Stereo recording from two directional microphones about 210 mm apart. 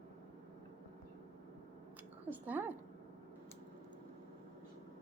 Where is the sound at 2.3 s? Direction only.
10° right (ahead or behind).